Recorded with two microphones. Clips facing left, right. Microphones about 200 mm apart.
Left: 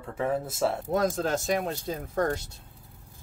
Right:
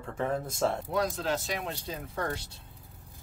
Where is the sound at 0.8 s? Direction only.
45° left (ahead or behind).